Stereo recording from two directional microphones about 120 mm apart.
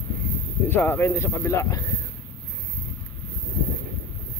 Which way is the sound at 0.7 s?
15° left (ahead or behind).